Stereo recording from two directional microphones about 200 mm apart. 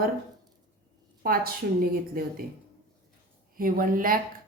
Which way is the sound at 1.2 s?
50° right (ahead or behind).